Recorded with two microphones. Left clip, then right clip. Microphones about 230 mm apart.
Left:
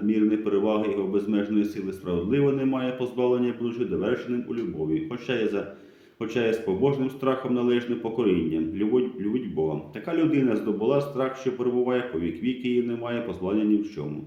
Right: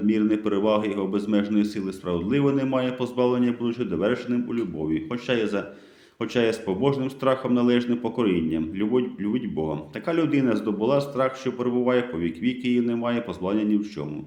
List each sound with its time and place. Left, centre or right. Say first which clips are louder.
0.1 s speech: left 1 dB; right